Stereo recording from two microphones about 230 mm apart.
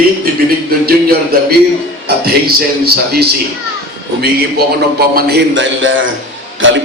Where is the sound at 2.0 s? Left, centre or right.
Right.